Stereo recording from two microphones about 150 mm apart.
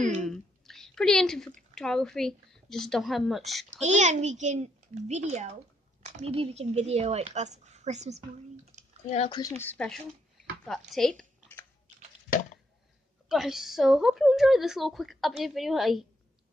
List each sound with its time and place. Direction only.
0.1 s a sound: centre (ahead or behind)
1.8 s a woman's voice: 5° left (ahead or behind)
3.7 s speech: 50° right (ahead or behind)
8.7 s typing: 50° right (ahead or behind)
9.6 s a woman's voice: 10° left (ahead or behind)
13.3 s a woman's voice: centre (ahead or behind)